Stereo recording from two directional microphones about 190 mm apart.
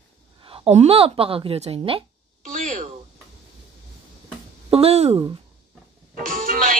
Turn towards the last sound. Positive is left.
turn(degrees=-45)  # may be behind; listen again after turning